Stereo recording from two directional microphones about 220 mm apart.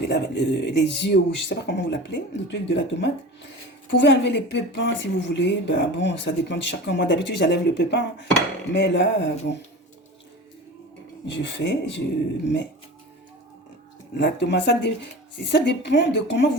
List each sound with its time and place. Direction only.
0.1 s speech: 50° left (ahead or behind)
11.3 s speech: 55° left (ahead or behind)
14.2 s speech: 50° left (ahead or behind)